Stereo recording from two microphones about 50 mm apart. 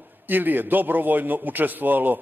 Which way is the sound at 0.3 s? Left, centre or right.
Right.